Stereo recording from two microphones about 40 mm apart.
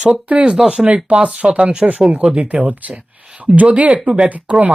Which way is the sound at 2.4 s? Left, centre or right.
Right.